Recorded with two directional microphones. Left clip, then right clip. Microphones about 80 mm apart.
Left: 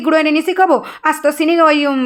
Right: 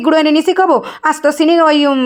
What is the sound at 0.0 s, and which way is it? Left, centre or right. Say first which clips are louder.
Speech: right 2 dB; right.